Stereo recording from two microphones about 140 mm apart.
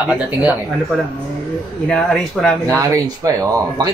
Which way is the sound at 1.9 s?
5° left (ahead or behind).